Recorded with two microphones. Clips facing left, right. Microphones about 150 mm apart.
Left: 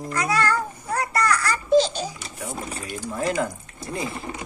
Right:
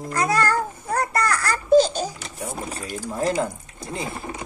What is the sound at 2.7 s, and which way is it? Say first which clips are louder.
Speech: right 1 dB; 35° right (ahead or behind).